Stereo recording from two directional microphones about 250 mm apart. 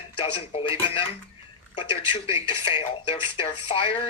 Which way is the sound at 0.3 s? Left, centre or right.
Left.